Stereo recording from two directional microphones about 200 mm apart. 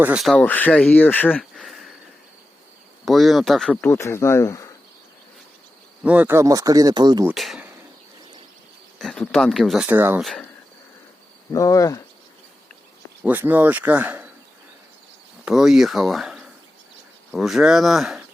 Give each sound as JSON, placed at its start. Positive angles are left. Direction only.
{"t": 0.0, "sound": "speech", "side_deg": -5}
{"t": 3.1, "sound": "speech", "side_deg": 0}
{"t": 6.0, "sound": "speech", "side_deg": -5}
{"t": 7.3, "sound": "speech", "side_deg": 0}
{"t": 9.0, "sound": "speech", "side_deg": 0}
{"t": 10.2, "sound": "speech", "side_deg": 0}
{"t": 11.5, "sound": "speech", "side_deg": 15}
{"t": 13.2, "sound": "speech", "side_deg": -10}
{"t": 15.4, "sound": "speech", "side_deg": 0}